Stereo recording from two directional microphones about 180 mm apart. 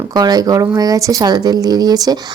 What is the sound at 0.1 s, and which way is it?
Speech, 20° right (ahead or behind).